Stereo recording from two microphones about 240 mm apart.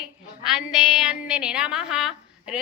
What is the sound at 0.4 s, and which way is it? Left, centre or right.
A woman's voice, centre.